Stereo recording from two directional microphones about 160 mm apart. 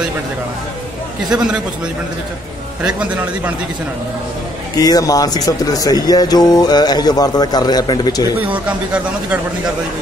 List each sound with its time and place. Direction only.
1.3 s a man's voice: 5° right (ahead or behind)
2.8 s speech: 10° right (ahead or behind)
4.7 s speech: 20° left (ahead or behind)
8.6 s speech: 5° right (ahead or behind)